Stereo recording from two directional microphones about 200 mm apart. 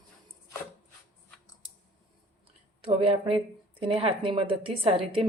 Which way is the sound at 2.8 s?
25° right (ahead or behind).